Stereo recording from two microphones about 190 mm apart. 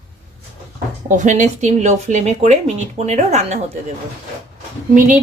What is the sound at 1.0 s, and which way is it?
Speech, 40° right (ahead or behind).